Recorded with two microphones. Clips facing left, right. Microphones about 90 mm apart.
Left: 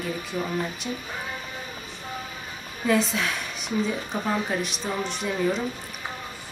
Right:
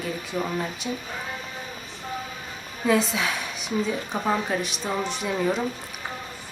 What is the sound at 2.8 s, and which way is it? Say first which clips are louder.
A woman's voice: right 1 dB; centre (ahead or behind).